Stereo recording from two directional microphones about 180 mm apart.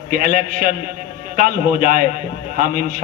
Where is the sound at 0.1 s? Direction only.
50° right (ahead or behind).